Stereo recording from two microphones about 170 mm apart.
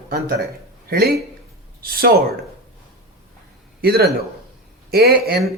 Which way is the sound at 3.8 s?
65° right (ahead or behind).